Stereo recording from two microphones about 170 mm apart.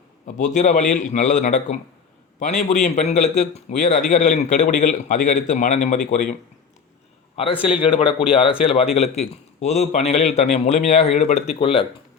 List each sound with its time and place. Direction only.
0.3 s a man's voice: 45° left (ahead or behind)
7.3 s a man's voice: 35° left (ahead or behind)